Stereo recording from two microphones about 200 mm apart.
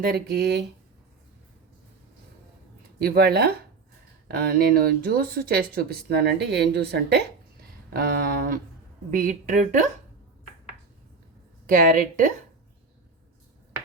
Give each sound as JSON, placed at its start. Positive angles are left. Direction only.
{"t": 0.0, "sound": "speech", "side_deg": -50}
{"t": 3.0, "sound": "a woman's voice", "side_deg": -55}
{"t": 11.6, "sound": "speech", "side_deg": -45}